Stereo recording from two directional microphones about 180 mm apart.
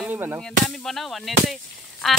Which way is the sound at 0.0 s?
10° right (ahead or behind).